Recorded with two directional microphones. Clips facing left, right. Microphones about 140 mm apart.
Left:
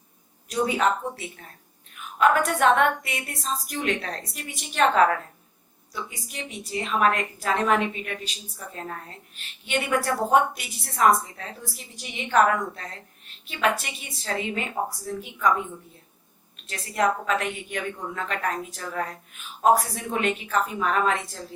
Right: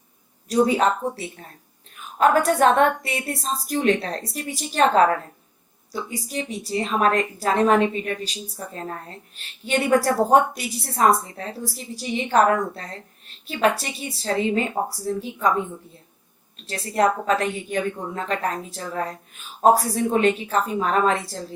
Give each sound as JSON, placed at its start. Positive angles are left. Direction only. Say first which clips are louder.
{"t": 0.4, "sound": "a woman's voice", "louder": "right 5 dB", "side_deg": -35}
{"t": 16.6, "sound": "a woman's voice", "louder": "right 4 dB", "side_deg": -35}